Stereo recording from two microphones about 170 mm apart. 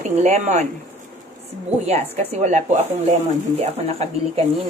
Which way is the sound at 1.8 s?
40° right (ahead or behind).